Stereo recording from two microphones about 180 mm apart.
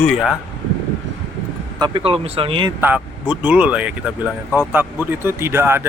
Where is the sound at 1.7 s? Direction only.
25° right (ahead or behind).